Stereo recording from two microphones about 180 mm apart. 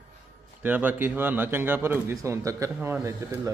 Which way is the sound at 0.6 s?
10° right (ahead or behind).